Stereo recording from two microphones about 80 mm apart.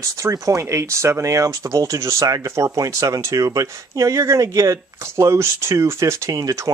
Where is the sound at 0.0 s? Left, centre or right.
Right.